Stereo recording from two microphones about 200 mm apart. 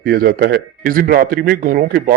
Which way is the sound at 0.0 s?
45° right (ahead or behind).